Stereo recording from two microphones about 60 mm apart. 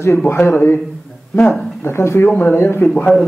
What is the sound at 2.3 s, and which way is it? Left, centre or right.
Speech, left.